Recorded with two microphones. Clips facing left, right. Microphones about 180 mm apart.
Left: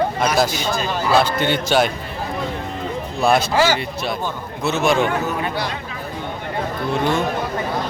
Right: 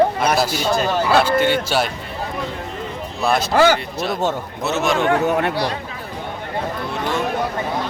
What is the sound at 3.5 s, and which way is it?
Speech, 55° right (ahead or behind).